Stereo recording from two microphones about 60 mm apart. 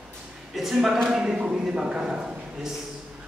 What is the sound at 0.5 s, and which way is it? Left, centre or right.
A man's voice, centre.